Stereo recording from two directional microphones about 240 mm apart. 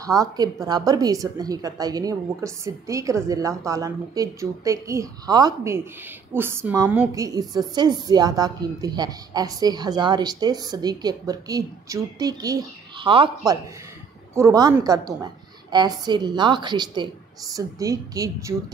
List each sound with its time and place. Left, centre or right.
0.0 s speech: centre
14.3 s speech: centre